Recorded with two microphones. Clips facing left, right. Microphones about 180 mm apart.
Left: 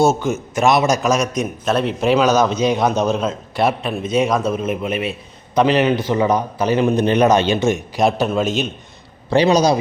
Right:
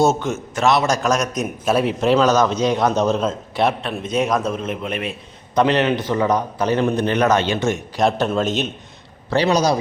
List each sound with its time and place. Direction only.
0.0 s a man's voice: centre (ahead or behind)
2.0 s a man's voice: 10° left (ahead or behind)
3.1 s a man's voice: centre (ahead or behind)
6.9 s a man's voice: 15° left (ahead or behind); by 8.7 s centre (ahead or behind)
9.3 s a man's voice: 15° left (ahead or behind)